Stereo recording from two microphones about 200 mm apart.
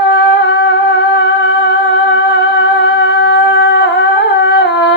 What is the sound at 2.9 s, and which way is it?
Humming, 60° left (ahead or behind).